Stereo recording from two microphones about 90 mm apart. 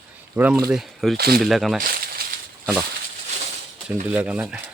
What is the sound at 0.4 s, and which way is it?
Speech, 10° right (ahead or behind).